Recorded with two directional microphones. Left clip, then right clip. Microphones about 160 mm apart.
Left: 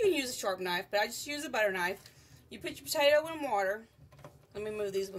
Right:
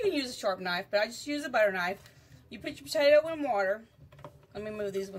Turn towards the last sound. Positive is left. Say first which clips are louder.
# even
turn(degrees=15)  # may be behind; listen again after turning